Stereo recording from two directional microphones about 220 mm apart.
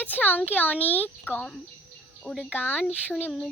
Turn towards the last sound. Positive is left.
turn(degrees=10)  # may be behind; listen again after turning